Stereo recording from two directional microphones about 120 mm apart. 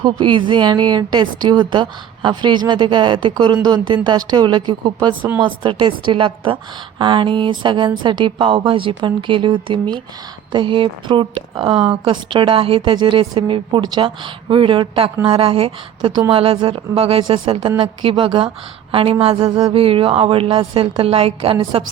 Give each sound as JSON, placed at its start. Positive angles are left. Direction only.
{"t": 0.0, "sound": "a woman's voice", "side_deg": -40}